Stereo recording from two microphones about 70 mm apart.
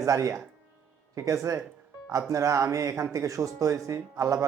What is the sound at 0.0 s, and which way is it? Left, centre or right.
Speech, right.